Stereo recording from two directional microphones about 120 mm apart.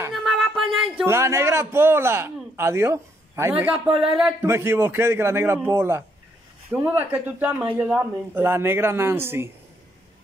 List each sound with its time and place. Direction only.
0.1 s a sound: centre (ahead or behind)
1.0 s a man's voice: 20° right (ahead or behind)
4.4 s a man's voice: 20° right (ahead or behind)